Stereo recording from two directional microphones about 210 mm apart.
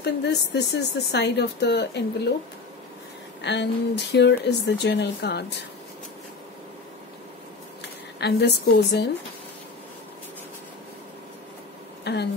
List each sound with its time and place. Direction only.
0.0 s speech: 55° left (ahead or behind)
3.4 s speech: 55° left (ahead or behind)
8.2 s speech: 55° left (ahead or behind)
12.0 s speech: 50° left (ahead or behind)